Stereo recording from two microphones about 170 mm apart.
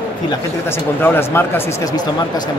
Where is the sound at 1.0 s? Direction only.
15° left (ahead or behind).